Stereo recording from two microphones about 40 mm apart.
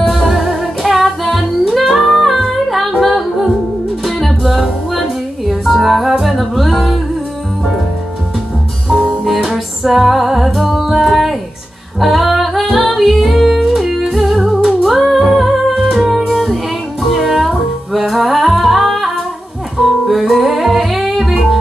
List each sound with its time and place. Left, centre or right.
0.3 s music: centre
1.2 s music: centre
3.0 s humming: centre
4.0 s music: centre
9.5 s music: centre
17.0 s music: centre
17.3 s music: centre